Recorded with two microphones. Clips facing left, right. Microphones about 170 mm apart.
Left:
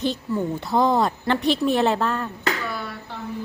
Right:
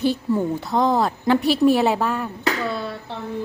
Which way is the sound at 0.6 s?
Centre (ahead or behind).